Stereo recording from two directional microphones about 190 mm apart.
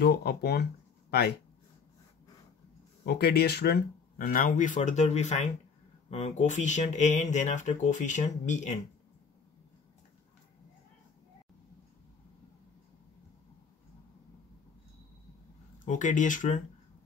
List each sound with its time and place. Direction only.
0.0 s speech: 55° left (ahead or behind)
3.1 s speech: 55° left (ahead or behind)
4.3 s speech: 45° left (ahead or behind)
15.8 s speech: 40° left (ahead or behind)